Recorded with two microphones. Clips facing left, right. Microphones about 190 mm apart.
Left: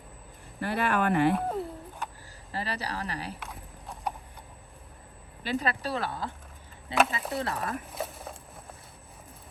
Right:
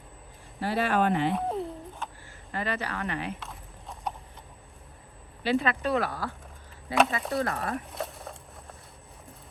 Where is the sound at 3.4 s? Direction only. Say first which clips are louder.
Left 1 dB; centre (ahead or behind).